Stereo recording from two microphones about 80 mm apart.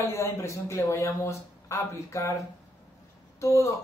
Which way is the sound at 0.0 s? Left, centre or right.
Left.